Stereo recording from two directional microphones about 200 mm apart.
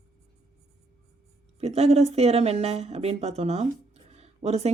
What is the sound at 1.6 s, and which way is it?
A woman's voice, 30° right (ahead or behind).